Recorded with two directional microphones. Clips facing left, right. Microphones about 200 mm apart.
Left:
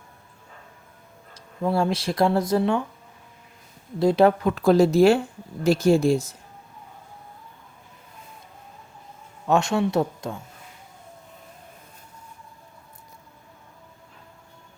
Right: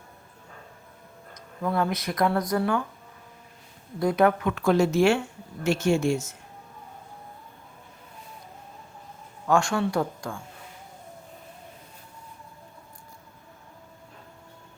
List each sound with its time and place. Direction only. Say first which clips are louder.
1.3 s speech: left 4 dB; 30° left (ahead or behind)
4.0 s speech: left 4 dB; 30° left (ahead or behind)
9.5 s speech: left 2 dB; 20° left (ahead or behind)